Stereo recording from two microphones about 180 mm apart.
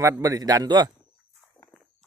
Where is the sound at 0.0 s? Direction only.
20° right (ahead or behind).